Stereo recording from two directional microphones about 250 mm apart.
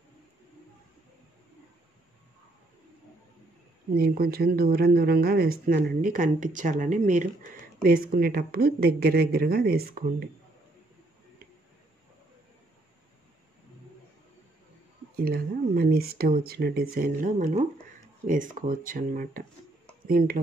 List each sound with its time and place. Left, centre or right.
3.9 s speech: right
15.2 s speech: right